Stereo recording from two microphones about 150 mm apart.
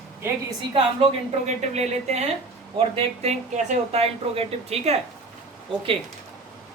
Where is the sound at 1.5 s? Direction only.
50° right (ahead or behind).